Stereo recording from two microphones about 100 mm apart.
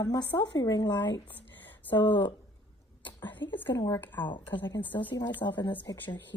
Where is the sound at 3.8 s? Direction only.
30° left (ahead or behind).